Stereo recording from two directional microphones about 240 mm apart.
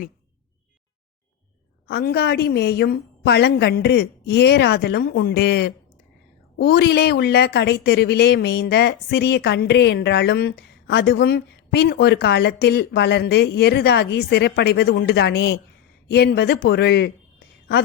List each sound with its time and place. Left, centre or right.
1.9 s a woman's voice: left